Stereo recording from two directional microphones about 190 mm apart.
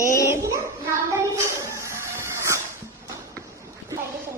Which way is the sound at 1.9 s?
15° right (ahead or behind).